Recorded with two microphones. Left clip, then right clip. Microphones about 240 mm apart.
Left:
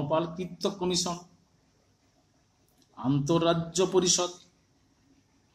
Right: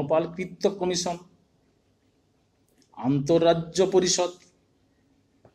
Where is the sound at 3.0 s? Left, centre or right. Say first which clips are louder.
Right 5 dB; centre.